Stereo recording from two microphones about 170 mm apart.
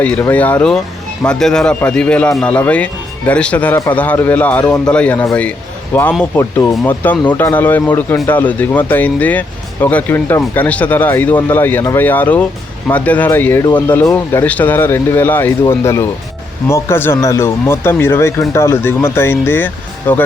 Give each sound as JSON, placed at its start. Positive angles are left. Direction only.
{"t": 0.0, "sound": "speech", "side_deg": 10}